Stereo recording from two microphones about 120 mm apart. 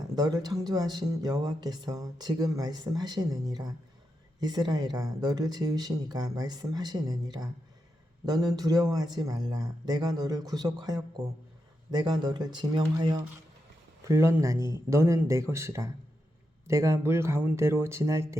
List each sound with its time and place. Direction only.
0.2 s speech: 35° right (ahead or behind)
14.1 s speech: 25° right (ahead or behind)